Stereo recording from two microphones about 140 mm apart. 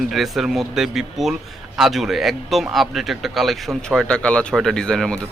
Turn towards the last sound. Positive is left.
turn(degrees=5)  # may be behind; listen again after turning